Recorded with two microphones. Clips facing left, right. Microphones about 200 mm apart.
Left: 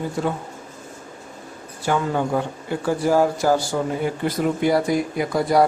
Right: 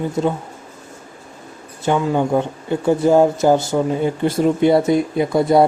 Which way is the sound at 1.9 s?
15° right (ahead or behind).